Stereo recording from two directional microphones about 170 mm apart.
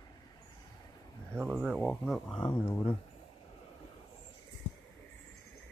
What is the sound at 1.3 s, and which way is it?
Speech, 10° right (ahead or behind).